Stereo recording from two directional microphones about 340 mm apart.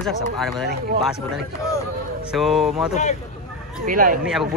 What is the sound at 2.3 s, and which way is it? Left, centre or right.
Speech, centre.